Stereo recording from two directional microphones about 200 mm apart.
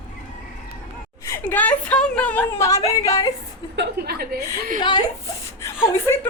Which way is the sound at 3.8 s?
55° right (ahead or behind).